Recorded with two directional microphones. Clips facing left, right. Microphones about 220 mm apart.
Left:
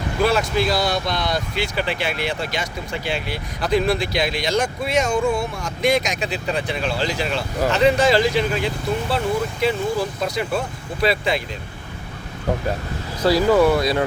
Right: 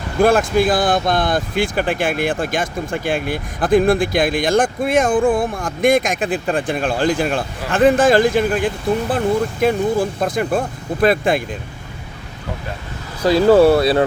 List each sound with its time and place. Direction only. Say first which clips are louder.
0.2 s speech: right 6 dB; 50° right (ahead or behind)
13.2 s speech: right 5 dB; 30° right (ahead or behind)